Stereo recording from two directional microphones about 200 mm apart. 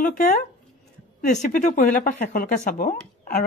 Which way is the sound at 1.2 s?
40° left (ahead or behind).